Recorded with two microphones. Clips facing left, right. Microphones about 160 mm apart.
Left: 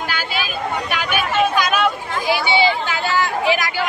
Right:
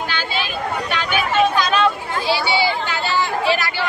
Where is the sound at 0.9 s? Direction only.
10° left (ahead or behind).